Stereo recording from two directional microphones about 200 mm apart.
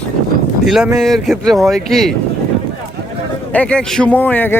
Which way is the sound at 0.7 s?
Centre (ahead or behind).